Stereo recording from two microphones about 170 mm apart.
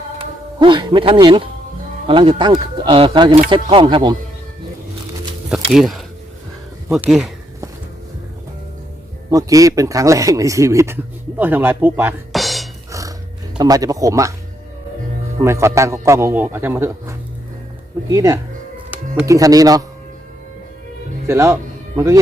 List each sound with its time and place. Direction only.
0.2 s speech: 30° right (ahead or behind)
5.6 s speech: centre (ahead or behind)
9.3 s speech: 20° right (ahead or behind)
12.3 s music: centre (ahead or behind)
12.9 s music: 20° right (ahead or behind)
13.6 s speech: 20° right (ahead or behind)
15.4 s speech: 15° right (ahead or behind)
21.2 s speech: 15° right (ahead or behind)